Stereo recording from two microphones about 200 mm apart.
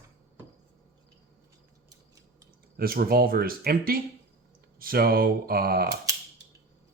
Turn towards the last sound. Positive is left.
turn(degrees=-50)  # may be behind; listen again after turning